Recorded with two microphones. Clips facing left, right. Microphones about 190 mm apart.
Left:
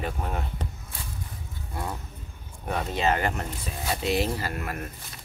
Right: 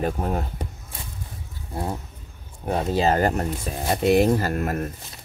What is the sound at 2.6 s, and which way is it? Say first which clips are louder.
Speech: right 5 dB; 30° right (ahead or behind).